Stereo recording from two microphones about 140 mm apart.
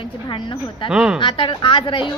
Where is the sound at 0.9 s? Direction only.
5° right (ahead or behind).